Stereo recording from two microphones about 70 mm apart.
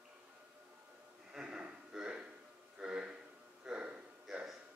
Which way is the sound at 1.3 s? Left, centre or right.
Centre.